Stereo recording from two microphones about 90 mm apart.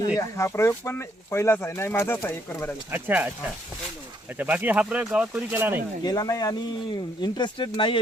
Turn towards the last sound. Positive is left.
turn(degrees=70)  # may be behind; listen again after turning